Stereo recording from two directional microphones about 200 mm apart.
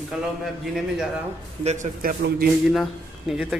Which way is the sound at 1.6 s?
40° right (ahead or behind).